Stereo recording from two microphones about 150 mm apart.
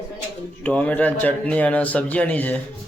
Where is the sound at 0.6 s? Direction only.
10° left (ahead or behind).